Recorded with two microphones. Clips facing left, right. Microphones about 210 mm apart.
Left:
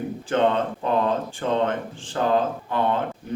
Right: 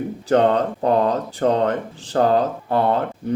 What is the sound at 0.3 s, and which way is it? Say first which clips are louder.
Speech: right 5 dB; 40° right (ahead or behind).